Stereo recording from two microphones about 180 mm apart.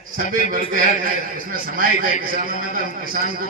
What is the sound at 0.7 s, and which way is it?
A man's voice, 50° right (ahead or behind).